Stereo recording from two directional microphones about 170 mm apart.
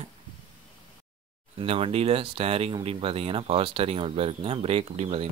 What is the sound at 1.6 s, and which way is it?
Speech, 35° right (ahead or behind).